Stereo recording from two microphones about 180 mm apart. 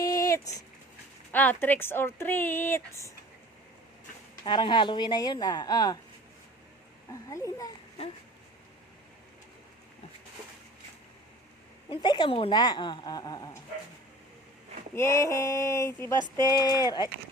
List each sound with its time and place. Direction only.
0.0 s a sound: 20° left (ahead or behind)
1.3 s speech: 10° left (ahead or behind)
4.4 s speech: 25° left (ahead or behind)
7.1 s speech: 15° left (ahead or behind)
11.9 s speech: 25° left (ahead or behind)
14.9 s speech: 15° left (ahead or behind)